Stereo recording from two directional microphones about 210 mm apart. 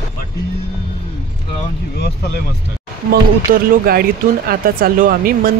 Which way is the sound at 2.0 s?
50° left (ahead or behind).